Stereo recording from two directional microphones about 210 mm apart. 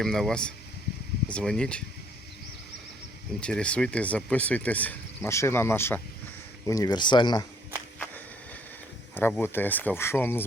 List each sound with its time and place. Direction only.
0.0 s speech: centre (ahead or behind)
3.4 s speech: 5° left (ahead or behind); by 7.4 s 20° left (ahead or behind)
7.9 s walk: 10° left (ahead or behind)
9.1 s speech: 10° left (ahead or behind)